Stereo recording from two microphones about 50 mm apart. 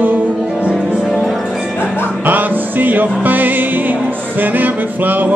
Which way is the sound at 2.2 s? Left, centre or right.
Right.